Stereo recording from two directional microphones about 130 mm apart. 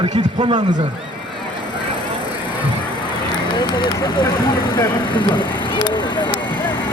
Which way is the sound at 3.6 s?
35° left (ahead or behind).